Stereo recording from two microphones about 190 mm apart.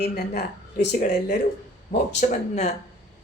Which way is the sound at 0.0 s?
60° left (ahead or behind).